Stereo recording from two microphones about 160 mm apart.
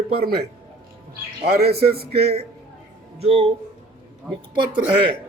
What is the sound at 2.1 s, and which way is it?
Speech, 40° right (ahead or behind).